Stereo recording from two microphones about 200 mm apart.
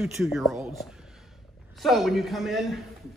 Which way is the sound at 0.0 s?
Centre (ahead or behind).